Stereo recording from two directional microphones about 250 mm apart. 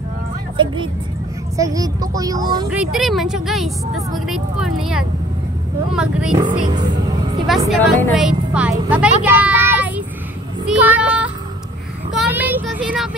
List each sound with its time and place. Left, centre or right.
0.6 s speech: centre
2.7 s speech: centre
6.3 s speech: centre
7.4 s a woman's voice: centre
10.7 s child singing: centre
12.2 s vehicle: centre